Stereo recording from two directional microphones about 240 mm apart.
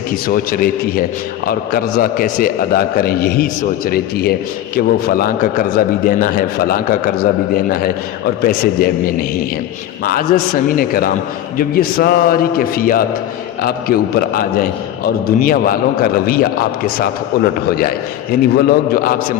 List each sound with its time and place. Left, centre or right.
0.3 s a man's voice: left
17.7 s a man's voice: left